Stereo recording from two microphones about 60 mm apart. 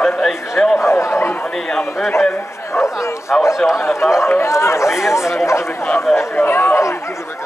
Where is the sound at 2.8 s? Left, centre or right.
Left.